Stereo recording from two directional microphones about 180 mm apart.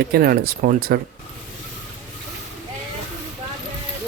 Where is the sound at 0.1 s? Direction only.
60° right (ahead or behind).